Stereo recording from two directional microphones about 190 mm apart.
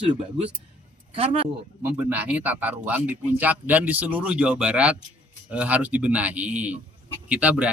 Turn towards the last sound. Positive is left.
turn(degrees=-5)  # may be behind; listen again after turning